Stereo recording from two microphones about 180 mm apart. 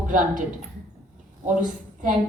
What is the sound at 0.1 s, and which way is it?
Speech, 45° right (ahead or behind).